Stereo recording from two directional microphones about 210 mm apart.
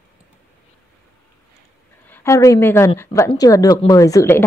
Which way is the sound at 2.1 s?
15° left (ahead or behind).